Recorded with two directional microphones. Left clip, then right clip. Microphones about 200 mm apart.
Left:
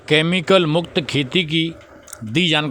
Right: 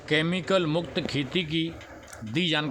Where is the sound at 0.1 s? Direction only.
40° left (ahead or behind).